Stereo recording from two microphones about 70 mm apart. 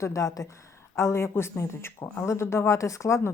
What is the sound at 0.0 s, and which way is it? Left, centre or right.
Speech, left.